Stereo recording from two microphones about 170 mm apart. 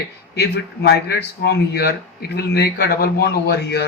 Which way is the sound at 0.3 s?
70° left (ahead or behind).